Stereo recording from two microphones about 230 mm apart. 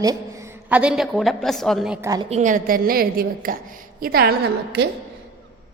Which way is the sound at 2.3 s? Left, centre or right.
Right.